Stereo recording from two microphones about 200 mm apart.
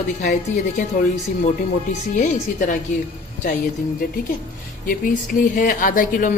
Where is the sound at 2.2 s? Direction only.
40° left (ahead or behind).